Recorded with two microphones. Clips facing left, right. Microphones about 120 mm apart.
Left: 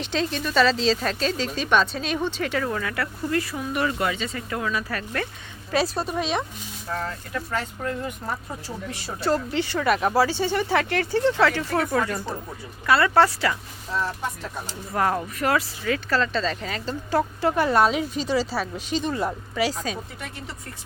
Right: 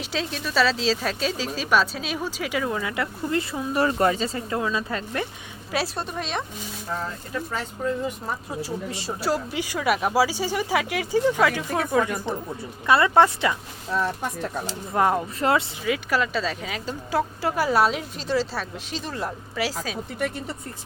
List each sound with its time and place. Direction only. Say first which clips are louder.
0.0 s speech: left 3 dB; 5° right (ahead or behind); by 5.3 s 20° right (ahead or behind)
5.7 s speech: left 4 dB; centre (ahead or behind)
9.2 s speech: left 3 dB; 10° right (ahead or behind)
14.9 s speech: right 2 dB; 20° right (ahead or behind)
15.8 s speech: even; 10° right (ahead or behind)